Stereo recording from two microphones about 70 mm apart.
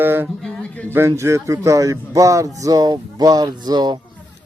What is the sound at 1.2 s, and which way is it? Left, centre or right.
Speech, right.